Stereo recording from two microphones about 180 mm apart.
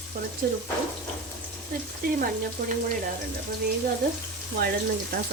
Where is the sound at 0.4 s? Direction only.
55° right (ahead or behind).